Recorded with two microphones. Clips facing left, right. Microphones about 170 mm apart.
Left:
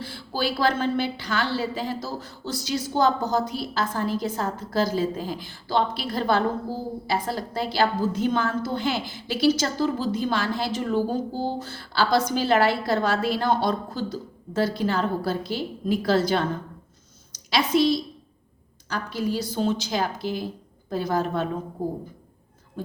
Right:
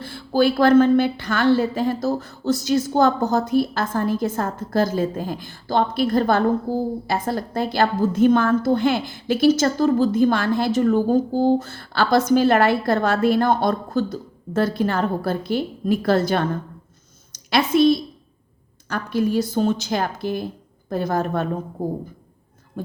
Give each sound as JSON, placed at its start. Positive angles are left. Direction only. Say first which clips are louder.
{"t": 0.0, "sound": "a woman's voice", "louder": "right 9 dB", "side_deg": -50}